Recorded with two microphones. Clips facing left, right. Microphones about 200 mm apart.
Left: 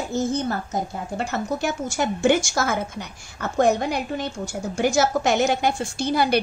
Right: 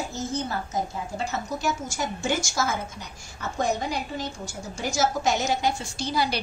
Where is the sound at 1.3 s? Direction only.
60° left (ahead or behind).